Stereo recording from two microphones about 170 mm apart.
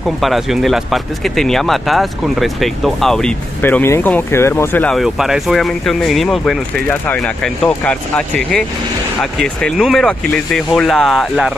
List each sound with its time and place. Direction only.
0.2 s speech: centre (ahead or behind)
4.9 s speech: centre (ahead or behind)